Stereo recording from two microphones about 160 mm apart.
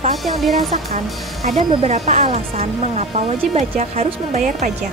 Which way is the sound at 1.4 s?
50° right (ahead or behind).